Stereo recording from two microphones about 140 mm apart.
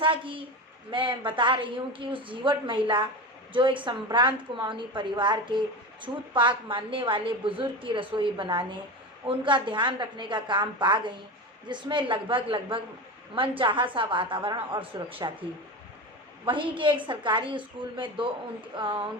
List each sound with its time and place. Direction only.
0.0 s a sound: 35° right (ahead or behind)
0.9 s a woman's voice: 35° right (ahead or behind)
16.5 s a woman's voice: 35° right (ahead or behind)